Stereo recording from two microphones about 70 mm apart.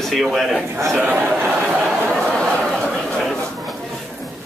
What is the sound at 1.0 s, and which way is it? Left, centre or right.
Speech, right.